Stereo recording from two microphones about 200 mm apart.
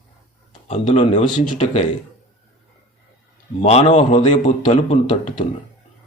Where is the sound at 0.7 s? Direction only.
35° left (ahead or behind).